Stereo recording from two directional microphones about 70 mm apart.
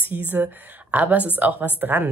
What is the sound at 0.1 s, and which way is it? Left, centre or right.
Speech, right.